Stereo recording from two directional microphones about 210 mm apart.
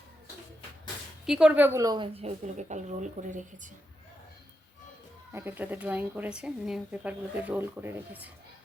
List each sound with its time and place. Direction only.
1.3 s a woman's voice: 5° right (ahead or behind); by 3.7 s 35° right (ahead or behind)
5.3 s a woman's voice: 10° right (ahead or behind)